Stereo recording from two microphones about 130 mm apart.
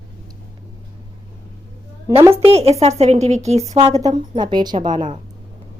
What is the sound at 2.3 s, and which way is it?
A woman's voice, 50° right (ahead or behind).